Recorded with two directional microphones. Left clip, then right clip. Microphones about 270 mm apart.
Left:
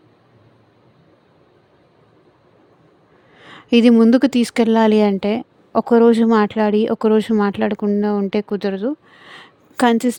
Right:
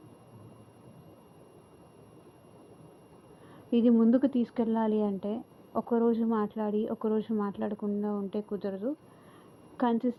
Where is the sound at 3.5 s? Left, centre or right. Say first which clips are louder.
Left 13 dB; left.